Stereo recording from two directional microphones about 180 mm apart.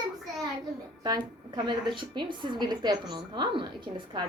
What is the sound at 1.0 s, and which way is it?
A woman's voice, 20° right (ahead or behind).